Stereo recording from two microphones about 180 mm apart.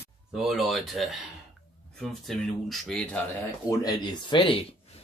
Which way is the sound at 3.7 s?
20° left (ahead or behind).